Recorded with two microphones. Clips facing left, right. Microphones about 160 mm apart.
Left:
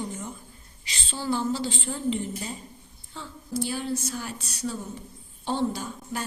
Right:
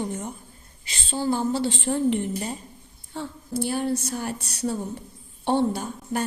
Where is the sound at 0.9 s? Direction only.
50° right (ahead or behind).